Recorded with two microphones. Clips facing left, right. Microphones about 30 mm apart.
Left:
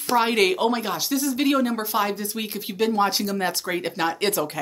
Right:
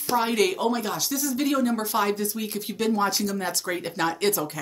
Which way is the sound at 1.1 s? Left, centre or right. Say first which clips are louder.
Left 4 dB; left.